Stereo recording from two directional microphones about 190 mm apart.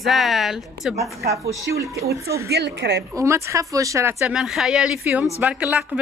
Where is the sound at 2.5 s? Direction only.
60° right (ahead or behind).